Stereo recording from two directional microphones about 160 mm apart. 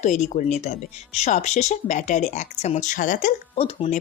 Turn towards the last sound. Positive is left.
turn(degrees=45)  # may be behind; listen again after turning